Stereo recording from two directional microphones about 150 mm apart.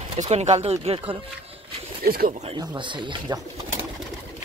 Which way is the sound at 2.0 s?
80° right.